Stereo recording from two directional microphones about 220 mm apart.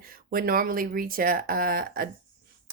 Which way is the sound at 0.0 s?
40° right (ahead or behind).